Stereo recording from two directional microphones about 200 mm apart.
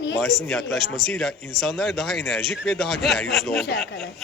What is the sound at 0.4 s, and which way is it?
A man's voice, centre (ahead or behind).